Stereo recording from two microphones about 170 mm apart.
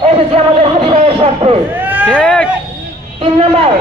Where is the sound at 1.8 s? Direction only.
10° right (ahead or behind).